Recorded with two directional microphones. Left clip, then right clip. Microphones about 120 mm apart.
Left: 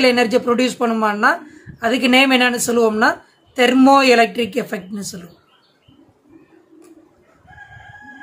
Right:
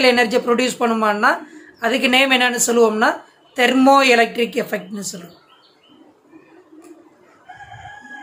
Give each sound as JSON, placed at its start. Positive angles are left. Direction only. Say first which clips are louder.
{"t": 0.0, "sound": "a woman's voice", "louder": "even", "side_deg": 25}